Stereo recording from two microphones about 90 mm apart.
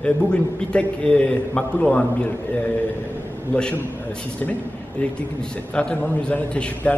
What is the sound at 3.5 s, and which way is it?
Speech, 15° left (ahead or behind).